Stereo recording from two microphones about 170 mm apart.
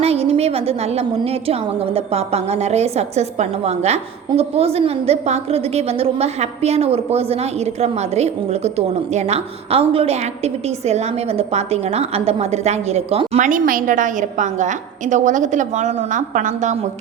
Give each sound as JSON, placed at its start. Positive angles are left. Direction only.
{"t": 0.0, "sound": "a woman's voice", "side_deg": -35}
{"t": 13.5, "sound": "a woman's voice", "side_deg": -55}